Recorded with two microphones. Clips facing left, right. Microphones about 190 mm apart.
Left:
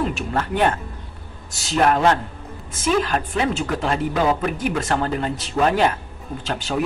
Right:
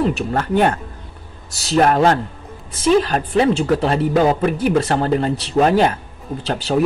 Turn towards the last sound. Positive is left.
turn(degrees=-35)  # may be behind; listen again after turning